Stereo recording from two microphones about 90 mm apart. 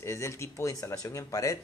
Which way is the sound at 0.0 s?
30° left (ahead or behind).